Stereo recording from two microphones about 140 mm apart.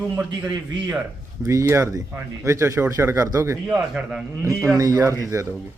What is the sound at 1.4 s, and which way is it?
Speech, 20° right (ahead or behind).